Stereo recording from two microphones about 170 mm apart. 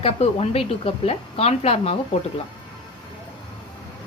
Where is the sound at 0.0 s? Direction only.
35° left (ahead or behind).